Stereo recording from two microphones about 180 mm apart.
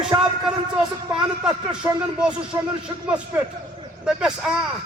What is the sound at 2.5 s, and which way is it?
Speech, 20° right (ahead or behind).